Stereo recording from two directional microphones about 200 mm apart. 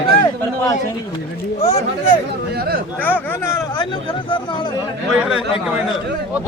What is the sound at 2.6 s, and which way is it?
Speech, 50° right (ahead or behind).